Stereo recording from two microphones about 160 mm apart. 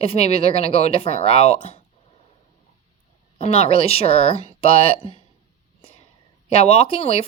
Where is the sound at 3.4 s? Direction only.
40° left (ahead or behind).